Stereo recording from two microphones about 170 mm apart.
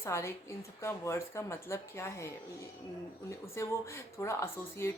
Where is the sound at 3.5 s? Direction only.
15° left (ahead or behind).